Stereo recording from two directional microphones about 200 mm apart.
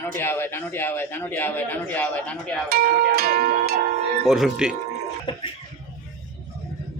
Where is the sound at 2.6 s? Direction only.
50° right (ahead or behind).